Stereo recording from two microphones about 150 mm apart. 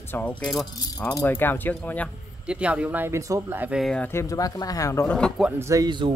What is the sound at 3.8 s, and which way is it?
Speech, 5° left (ahead or behind).